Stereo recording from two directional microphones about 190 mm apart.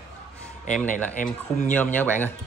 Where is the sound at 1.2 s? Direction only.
40° left (ahead or behind).